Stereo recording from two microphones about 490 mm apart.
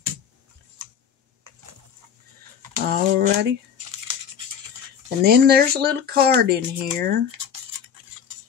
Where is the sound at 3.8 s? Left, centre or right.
Right.